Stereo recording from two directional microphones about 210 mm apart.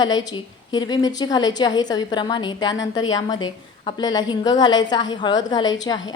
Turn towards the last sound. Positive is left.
turn(degrees=20)  # may be behind; listen again after turning